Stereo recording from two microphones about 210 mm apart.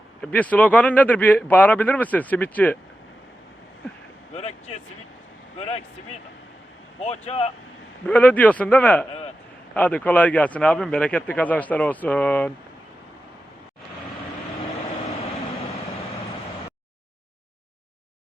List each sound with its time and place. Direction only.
0.2 s a man's voice: 5° left (ahead or behind)
4.4 s speech: 30° left (ahead or behind)
7.0 s speech: 30° left (ahead or behind)
8.0 s a man's voice: 5° left (ahead or behind)